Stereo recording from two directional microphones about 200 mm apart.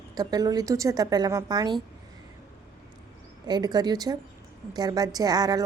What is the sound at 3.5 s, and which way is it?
A woman's voice, 20° right (ahead or behind).